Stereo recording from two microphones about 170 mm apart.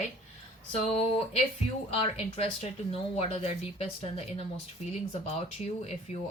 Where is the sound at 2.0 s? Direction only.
35° left (ahead or behind).